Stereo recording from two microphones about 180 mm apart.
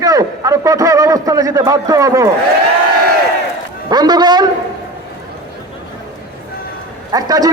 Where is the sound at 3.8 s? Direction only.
25° right (ahead or behind).